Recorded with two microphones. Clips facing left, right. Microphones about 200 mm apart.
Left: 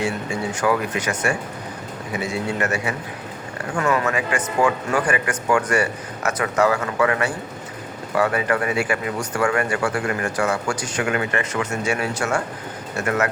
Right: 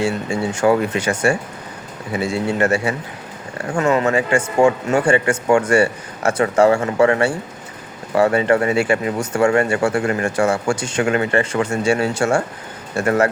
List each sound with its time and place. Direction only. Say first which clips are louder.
0.0 s speech: right 4 dB; 30° right (ahead or behind)